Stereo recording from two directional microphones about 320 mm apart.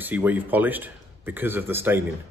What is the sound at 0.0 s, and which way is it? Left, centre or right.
A man's voice, centre.